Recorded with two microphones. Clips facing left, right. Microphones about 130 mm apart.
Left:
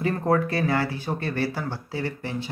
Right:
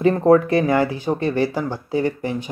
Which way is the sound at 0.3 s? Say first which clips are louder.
Right 7 dB; 20° right (ahead or behind).